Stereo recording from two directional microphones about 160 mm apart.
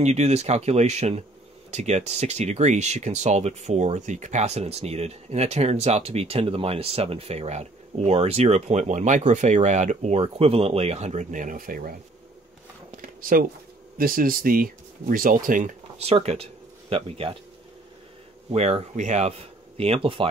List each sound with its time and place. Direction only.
0.0 s speech: 45° right (ahead or behind); by 11.9 s 60° right (ahead or behind)
12.9 s a sound: 60° right (ahead or behind)
13.9 s speech: 60° right (ahead or behind)
16.0 s speech: 40° right (ahead or behind)
18.5 s speech: 40° right (ahead or behind)